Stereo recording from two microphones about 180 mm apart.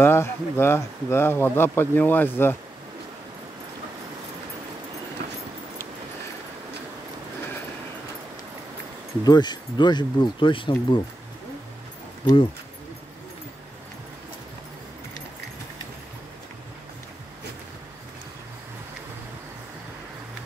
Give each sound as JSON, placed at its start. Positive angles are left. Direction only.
{"t": 0.0, "sound": "speech", "side_deg": 15}
{"t": 9.2, "sound": "speech", "side_deg": 25}